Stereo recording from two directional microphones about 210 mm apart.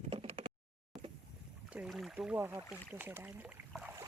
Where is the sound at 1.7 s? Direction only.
Centre (ahead or behind).